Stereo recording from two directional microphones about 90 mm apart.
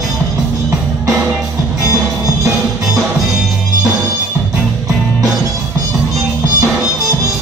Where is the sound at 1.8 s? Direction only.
40° right (ahead or behind).